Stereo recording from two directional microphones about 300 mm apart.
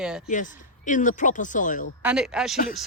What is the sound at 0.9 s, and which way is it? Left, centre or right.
Speech, left.